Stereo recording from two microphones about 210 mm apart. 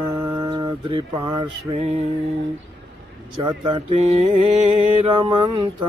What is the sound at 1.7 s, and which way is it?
Mantra, 30° right (ahead or behind).